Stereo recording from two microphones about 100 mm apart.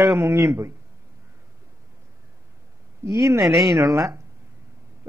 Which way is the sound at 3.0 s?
25° right (ahead or behind).